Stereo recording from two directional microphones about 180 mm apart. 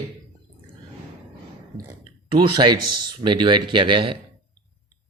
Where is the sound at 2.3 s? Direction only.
25° right (ahead or behind).